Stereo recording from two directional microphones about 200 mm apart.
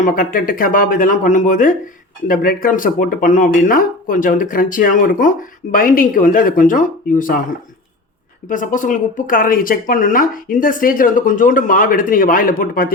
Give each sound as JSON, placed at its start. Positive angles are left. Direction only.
{"t": 0.0, "sound": "speech", "side_deg": 40}
{"t": 8.4, "sound": "speech", "side_deg": 40}